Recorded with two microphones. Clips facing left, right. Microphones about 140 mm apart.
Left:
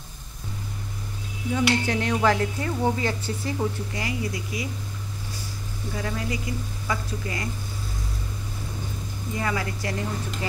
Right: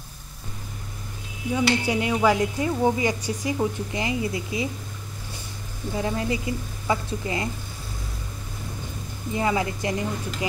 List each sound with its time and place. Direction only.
1.5 s a woman's voice: 10° right (ahead or behind)
5.9 s a woman's voice: 25° right (ahead or behind)
9.3 s a woman's voice: 20° right (ahead or behind)